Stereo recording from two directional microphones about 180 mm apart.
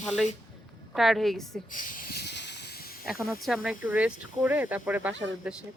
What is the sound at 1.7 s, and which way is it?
Hiss, 50° left (ahead or behind).